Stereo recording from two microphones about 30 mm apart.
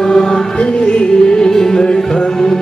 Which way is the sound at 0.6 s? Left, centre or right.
Left.